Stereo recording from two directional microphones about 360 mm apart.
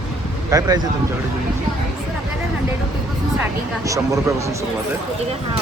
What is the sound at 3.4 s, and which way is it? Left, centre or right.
Speech, centre.